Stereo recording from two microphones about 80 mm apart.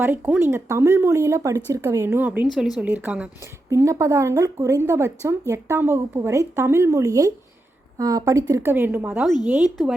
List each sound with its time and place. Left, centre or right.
0.0 s speech: right
2.2 s a woman's voice: right
3.7 s a woman's voice: right
8.6 s a woman's voice: right
9.6 s speech: centre